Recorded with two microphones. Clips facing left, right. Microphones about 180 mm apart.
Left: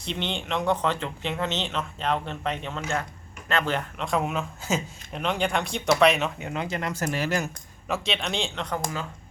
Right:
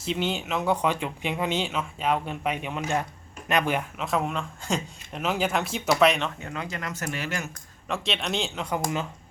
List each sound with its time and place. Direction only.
0.0 s speech: 5° right (ahead or behind)
6.4 s speech: 20° left (ahead or behind)
7.9 s speech: centre (ahead or behind)